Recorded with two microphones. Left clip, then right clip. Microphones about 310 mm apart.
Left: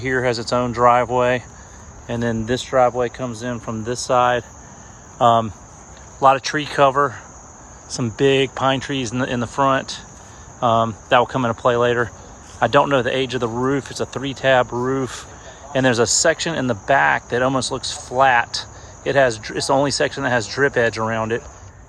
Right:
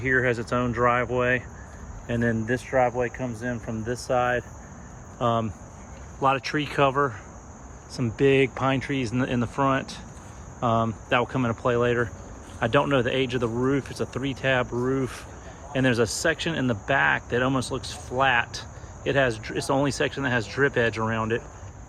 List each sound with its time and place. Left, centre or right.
0.0 s speech: centre